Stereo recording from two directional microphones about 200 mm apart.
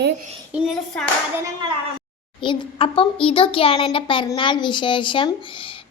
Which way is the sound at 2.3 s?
25° left (ahead or behind).